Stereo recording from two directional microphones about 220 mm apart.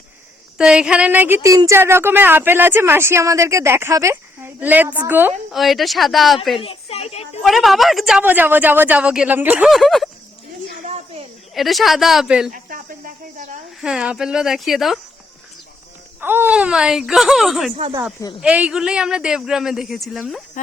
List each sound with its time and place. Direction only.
0.6 s speech: 5° right (ahead or behind)
6.6 s a sound: 25° left (ahead or behind)
7.4 s speech: centre (ahead or behind)
10.8 s snake: 30° right (ahead or behind)
11.5 s speech: centre (ahead or behind)
12.5 s a sound: 40° right (ahead or behind)
13.8 s speech: 5° right (ahead or behind)
16.2 s speech: 10° right (ahead or behind)